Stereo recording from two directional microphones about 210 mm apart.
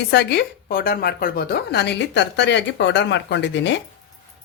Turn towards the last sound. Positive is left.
turn(degrees=60)  # may be behind; listen again after turning